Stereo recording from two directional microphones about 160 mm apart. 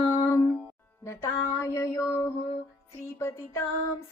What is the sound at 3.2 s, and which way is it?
Music, 15° left (ahead or behind).